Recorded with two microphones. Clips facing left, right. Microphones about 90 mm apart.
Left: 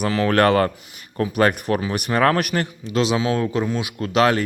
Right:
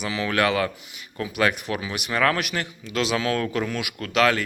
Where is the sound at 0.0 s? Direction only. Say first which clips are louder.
Left 6 dB; 45° left (ahead or behind).